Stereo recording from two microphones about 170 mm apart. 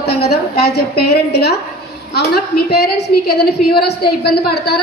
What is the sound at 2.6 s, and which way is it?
A woman's voice, 70° left (ahead or behind).